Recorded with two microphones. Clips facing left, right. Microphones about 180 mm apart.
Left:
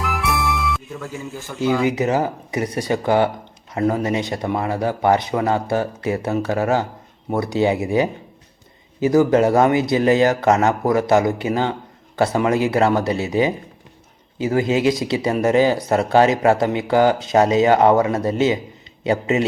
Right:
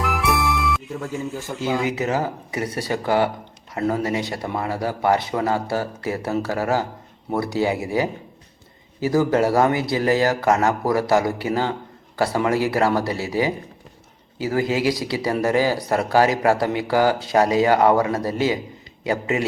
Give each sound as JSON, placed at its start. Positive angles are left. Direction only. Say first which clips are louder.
{"t": 0.0, "sound": "music", "louder": "right 1 dB", "side_deg": 0}
{"t": 1.8, "sound": "speech", "louder": "left 4 dB", "side_deg": 20}